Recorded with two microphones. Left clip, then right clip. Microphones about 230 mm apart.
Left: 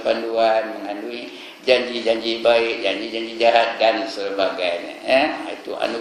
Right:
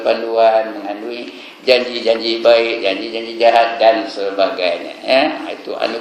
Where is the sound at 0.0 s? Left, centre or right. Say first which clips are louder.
Right 6 dB; centre.